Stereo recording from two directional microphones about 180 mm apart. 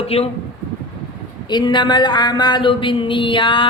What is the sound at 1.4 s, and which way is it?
A woman's voice, 25° left (ahead or behind).